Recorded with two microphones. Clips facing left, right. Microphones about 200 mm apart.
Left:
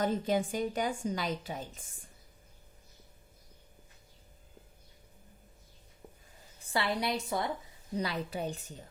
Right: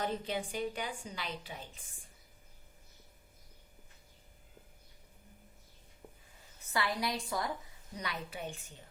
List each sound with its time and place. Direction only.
0.0 s a woman's voice: 45° left (ahead or behind)
6.0 s a sound: 5° left (ahead or behind)
6.7 s a woman's voice: 25° left (ahead or behind)